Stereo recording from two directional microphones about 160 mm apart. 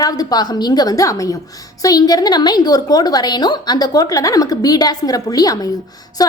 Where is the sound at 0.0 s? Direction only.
25° left (ahead or behind).